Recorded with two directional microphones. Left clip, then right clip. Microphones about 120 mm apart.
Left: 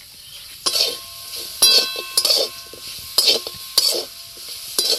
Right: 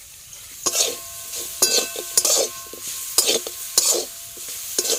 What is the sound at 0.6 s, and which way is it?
Stir, 25° right (ahead or behind).